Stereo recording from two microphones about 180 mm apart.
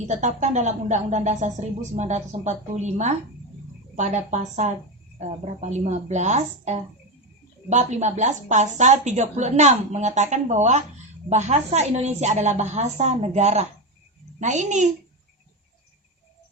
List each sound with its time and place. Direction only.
0.1 s a child's voice: 40° right (ahead or behind)